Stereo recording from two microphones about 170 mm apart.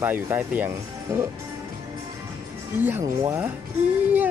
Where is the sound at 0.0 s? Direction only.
10° right (ahead or behind).